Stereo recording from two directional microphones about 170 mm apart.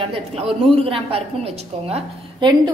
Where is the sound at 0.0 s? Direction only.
30° right (ahead or behind).